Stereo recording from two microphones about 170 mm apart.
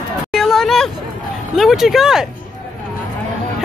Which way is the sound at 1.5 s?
Centre (ahead or behind).